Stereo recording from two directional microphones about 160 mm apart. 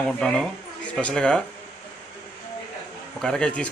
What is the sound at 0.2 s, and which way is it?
A man's voice, 5° left (ahead or behind).